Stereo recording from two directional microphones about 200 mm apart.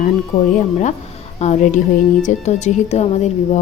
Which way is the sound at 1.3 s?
35° left (ahead or behind).